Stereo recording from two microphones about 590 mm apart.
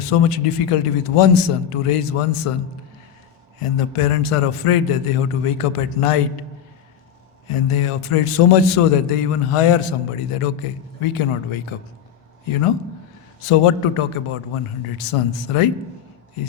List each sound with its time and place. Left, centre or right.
0.0 s a man's voice: left
3.6 s a man's voice: left
7.4 s a man's voice: left
13.4 s a man's voice: left